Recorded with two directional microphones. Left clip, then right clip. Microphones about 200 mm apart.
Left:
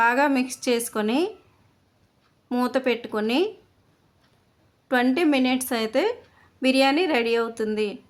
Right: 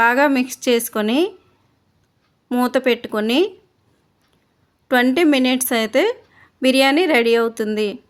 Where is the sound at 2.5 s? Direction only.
30° right (ahead or behind).